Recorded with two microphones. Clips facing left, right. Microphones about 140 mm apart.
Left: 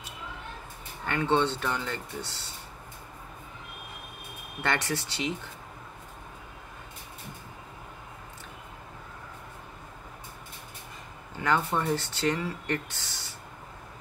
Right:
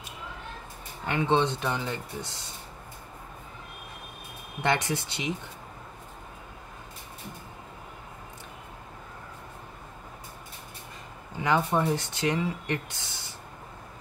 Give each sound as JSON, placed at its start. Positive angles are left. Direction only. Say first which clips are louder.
{"t": 1.0, "sound": "speech", "louder": "right 1 dB", "side_deg": -15}
{"t": 4.6, "sound": "speech", "louder": "right 3 dB", "side_deg": -15}
{"t": 11.3, "sound": "speech", "louder": "right 2 dB", "side_deg": -15}